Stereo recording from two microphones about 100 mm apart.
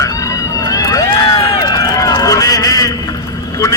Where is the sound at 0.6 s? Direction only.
35° left (ahead or behind).